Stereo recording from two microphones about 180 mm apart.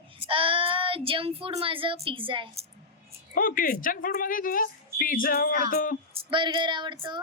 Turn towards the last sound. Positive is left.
turn(degrees=-25)  # may be behind; listen again after turning